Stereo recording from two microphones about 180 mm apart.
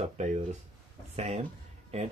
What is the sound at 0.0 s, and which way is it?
Speech, 40° right (ahead or behind).